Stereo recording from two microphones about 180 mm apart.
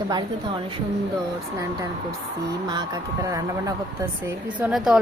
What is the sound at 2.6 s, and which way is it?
Speech, 20° right (ahead or behind).